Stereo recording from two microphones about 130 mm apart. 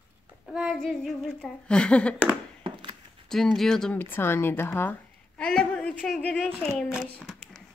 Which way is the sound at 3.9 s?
15° left (ahead or behind).